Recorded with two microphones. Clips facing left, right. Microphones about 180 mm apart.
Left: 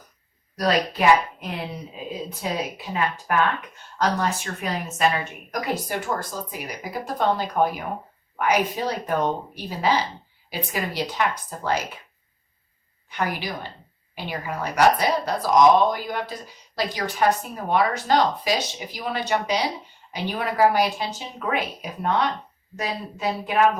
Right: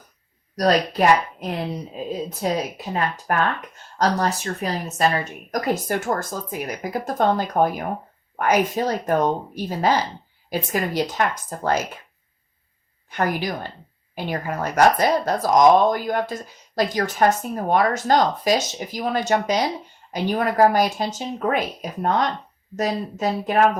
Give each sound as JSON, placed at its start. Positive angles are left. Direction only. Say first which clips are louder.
{"t": 0.5, "sound": "speech", "louder": "right 3 dB", "side_deg": -40}
{"t": 13.1, "sound": "speech", "louder": "right 4 dB", "side_deg": -45}